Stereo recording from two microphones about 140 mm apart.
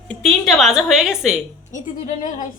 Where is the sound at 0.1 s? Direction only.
5° left (ahead or behind).